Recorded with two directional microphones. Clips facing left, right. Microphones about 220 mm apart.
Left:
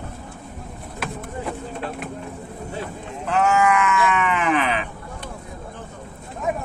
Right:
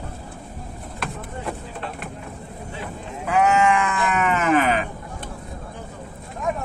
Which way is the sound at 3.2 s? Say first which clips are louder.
Right 1 dB; 15° right (ahead or behind).